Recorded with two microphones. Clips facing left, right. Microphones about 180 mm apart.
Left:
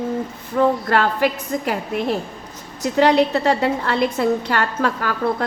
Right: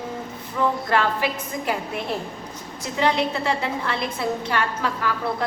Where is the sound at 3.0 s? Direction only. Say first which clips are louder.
Left 7 dB; 65° left (ahead or behind).